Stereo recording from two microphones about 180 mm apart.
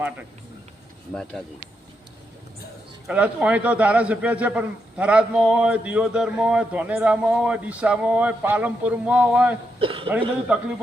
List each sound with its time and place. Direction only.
1.1 s speech: 5° left (ahead or behind)
3.1 s a man's voice: 5° right (ahead or behind)
9.8 s speech: 30° right (ahead or behind)